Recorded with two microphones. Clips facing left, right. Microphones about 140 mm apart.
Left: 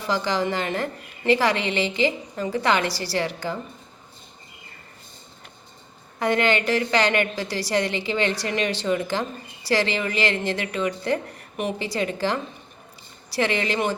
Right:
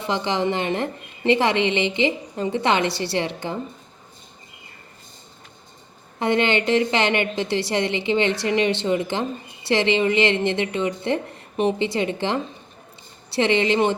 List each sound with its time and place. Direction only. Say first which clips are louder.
0.0 s a woman's voice: right 1 dB; 25° right (ahead or behind)
6.1 s a woman's voice: right 1 dB; 25° right (ahead or behind)